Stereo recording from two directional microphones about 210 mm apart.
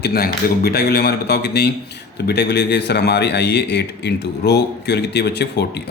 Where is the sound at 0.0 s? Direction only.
50° left (ahead or behind).